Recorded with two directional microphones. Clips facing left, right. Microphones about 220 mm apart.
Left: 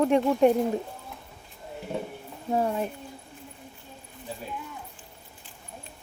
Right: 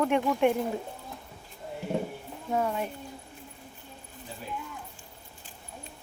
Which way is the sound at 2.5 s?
35° left (ahead or behind).